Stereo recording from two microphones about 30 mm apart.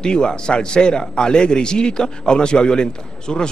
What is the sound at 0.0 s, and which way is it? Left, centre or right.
A man's voice, left.